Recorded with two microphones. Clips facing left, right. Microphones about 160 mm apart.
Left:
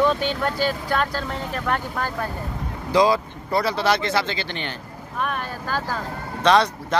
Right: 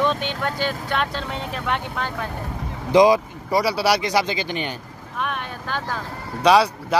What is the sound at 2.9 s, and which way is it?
Speech, 15° right (ahead or behind).